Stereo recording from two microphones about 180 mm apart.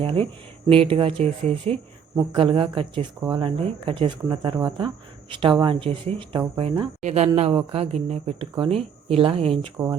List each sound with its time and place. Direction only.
0.0 s speech: 30° right (ahead or behind)
9.7 s speech: 15° right (ahead or behind)